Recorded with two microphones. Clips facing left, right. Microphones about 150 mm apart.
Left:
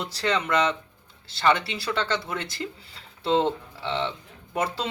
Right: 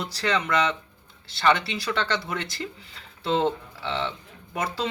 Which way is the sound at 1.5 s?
10° left (ahead or behind).